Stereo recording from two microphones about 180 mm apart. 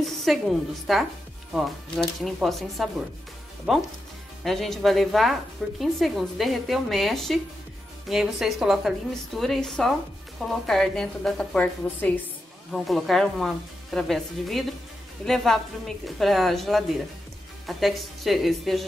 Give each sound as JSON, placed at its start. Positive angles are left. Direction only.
{"t": 0.0, "sound": "a woman's voice", "side_deg": 0}